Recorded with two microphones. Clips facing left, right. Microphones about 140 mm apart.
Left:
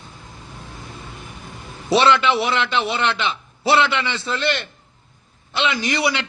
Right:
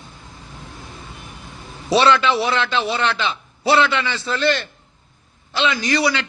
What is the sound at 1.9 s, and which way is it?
A man's voice, 25° left (ahead or behind).